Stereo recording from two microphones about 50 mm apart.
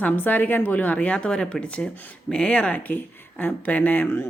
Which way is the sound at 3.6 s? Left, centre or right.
Left.